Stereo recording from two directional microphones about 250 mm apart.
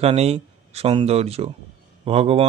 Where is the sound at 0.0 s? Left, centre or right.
Right.